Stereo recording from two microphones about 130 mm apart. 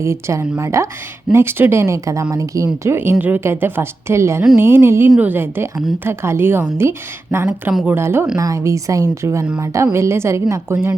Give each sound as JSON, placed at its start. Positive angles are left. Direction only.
{"t": 0.0, "sound": "a woman's voice", "side_deg": -20}
{"t": 7.4, "sound": "speech", "side_deg": -5}
{"t": 7.9, "sound": "a woman's voice", "side_deg": -20}